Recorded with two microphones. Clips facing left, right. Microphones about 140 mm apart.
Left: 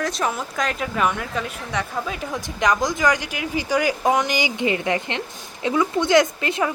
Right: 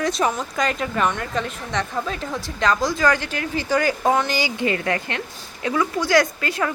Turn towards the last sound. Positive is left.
turn(degrees=20)  # may be behind; listen again after turning